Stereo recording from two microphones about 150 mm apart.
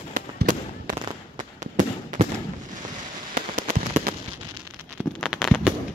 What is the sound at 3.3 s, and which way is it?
Fireworks, 60° right (ahead or behind).